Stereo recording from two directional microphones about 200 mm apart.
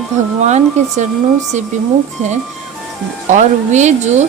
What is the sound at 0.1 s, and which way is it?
Speech, 35° right (ahead or behind).